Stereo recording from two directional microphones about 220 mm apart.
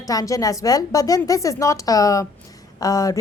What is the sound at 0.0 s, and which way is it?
A woman's voice, 15° left (ahead or behind).